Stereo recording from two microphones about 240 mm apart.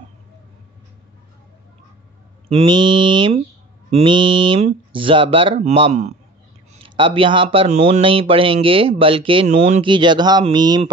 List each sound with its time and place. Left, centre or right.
2.5 s a man's voice: centre